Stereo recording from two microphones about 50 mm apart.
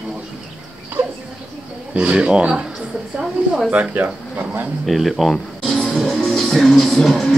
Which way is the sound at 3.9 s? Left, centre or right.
Right.